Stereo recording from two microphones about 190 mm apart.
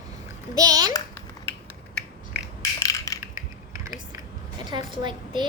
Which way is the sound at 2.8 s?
20° left (ahead or behind).